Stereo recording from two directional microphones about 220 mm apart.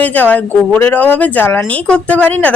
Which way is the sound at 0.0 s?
5° left (ahead or behind).